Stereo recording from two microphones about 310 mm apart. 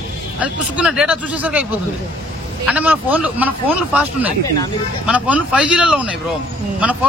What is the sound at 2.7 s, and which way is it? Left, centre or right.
A man's voice, centre.